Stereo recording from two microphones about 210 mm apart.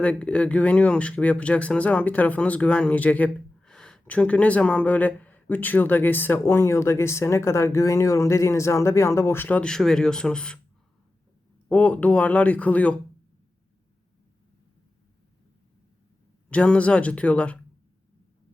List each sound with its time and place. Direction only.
0.0 s speech: 5° left (ahead or behind)
11.7 s speech: 5° left (ahead or behind)
16.5 s speech: 5° left (ahead or behind)